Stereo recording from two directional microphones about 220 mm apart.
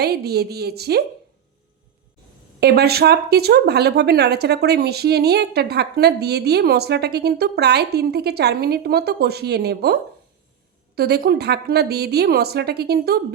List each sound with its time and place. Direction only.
0.0 s speech: 45° right (ahead or behind)
2.6 s speech: 45° right (ahead or behind)